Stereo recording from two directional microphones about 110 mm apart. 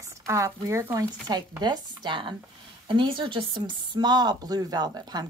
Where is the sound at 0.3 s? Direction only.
25° right (ahead or behind).